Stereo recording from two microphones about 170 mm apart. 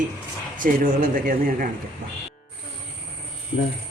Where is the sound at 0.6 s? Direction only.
55° right (ahead or behind).